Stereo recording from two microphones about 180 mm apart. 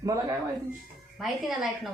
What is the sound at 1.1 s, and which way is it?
Speech, centre (ahead or behind).